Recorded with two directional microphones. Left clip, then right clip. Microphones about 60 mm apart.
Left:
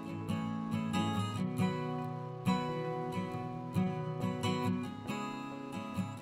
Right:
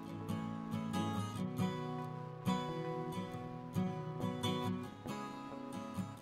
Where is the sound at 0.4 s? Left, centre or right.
Left.